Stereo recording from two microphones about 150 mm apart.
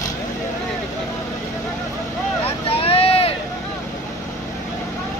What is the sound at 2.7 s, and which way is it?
Vehicle, 40° left (ahead or behind).